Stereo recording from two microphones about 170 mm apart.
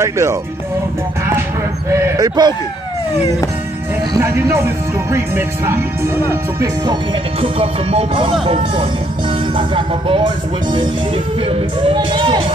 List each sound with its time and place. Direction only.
0.0 s speech: 15° right (ahead or behind)
2.1 s speech: 25° right (ahead or behind)
4.1 s speech: 20° right (ahead or behind)
7.3 s speech: 35° right (ahead or behind)